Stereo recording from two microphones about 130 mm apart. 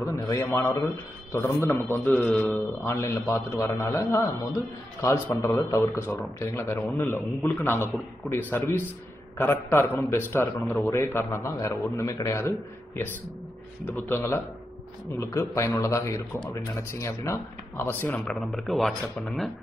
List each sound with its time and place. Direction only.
0.0 s a man's voice: 20° left (ahead or behind)
18.1 s speech: 5° left (ahead or behind)